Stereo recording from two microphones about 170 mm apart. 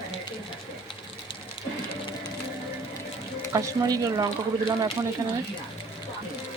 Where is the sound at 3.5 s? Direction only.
20° right (ahead or behind).